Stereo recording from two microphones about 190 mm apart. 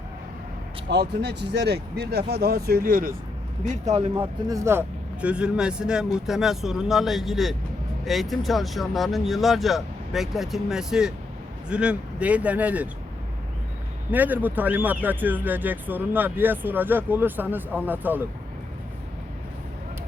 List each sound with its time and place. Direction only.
0.9 s speech: 60° right (ahead or behind)
3.6 s speech: 40° right (ahead or behind)
4.1 s speech: 15° right (ahead or behind)
14.1 s speech: 10° right (ahead or behind)